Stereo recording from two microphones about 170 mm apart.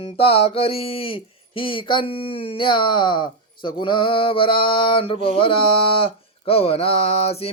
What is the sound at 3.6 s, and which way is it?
Mantra, 30° left (ahead or behind).